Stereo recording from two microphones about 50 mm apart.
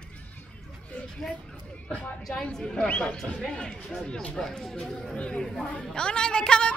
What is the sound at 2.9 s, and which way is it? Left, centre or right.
Speech, left.